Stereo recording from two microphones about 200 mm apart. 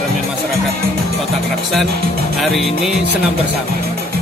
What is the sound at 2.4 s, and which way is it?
Music, centre (ahead or behind).